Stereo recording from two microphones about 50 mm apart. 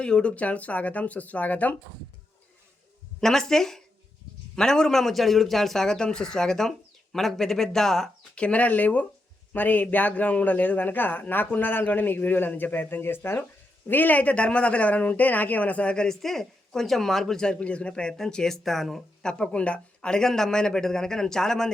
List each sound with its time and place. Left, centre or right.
0.0 s speech: centre
3.2 s a man's voice: centre
8.4 s a man's voice: left
16.0 s a man's voice: centre
18.1 s speech: centre
19.2 s a man's voice: centre